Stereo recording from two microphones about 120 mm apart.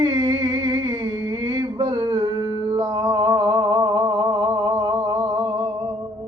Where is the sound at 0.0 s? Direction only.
35° right (ahead or behind).